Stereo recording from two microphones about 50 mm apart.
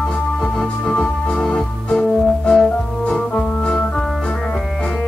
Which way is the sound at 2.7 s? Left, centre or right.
Centre.